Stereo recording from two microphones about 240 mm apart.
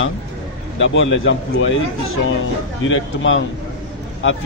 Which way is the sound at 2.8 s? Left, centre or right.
Left.